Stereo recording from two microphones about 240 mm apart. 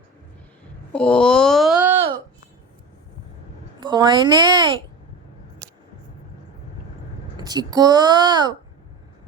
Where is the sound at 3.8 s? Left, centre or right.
Centre.